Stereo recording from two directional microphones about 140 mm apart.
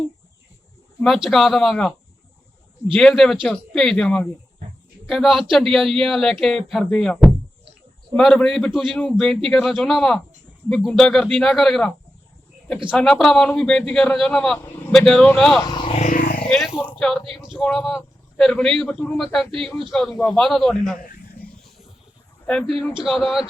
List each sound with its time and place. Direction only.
1.0 s a man's voice: centre (ahead or behind)
12.9 s a man's voice: 5° left (ahead or behind)
15.6 s speech: 30° left (ahead or behind)
15.9 s a sound: 60° left (ahead or behind); by 16.5 s 85° left
17.0 s a man's voice: 5° left (ahead or behind)
22.4 s a man's voice: 5° left (ahead or behind)